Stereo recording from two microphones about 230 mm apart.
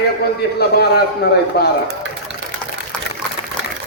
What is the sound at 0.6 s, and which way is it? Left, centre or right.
A man's voice, left.